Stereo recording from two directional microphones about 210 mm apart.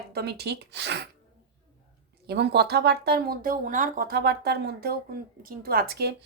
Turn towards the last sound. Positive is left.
turn(degrees=-50)  # may be behind; listen again after turning